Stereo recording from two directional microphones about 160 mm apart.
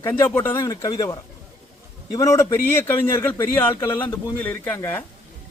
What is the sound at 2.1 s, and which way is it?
A man's voice, 20° left (ahead or behind).